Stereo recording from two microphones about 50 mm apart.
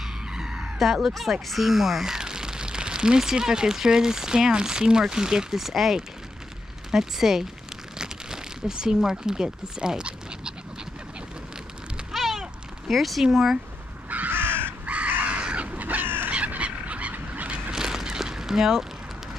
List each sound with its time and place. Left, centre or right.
0.3 s frog: centre
1.0 s speech: centre
12.1 s cat: centre
13.2 s speech: centre
14.1 s crow: right
14.9 s crow: right
16.3 s fowl: right
17.6 s a sound: centre